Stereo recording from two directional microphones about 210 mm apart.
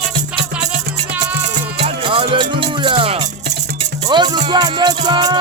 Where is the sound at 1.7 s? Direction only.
25° right (ahead or behind).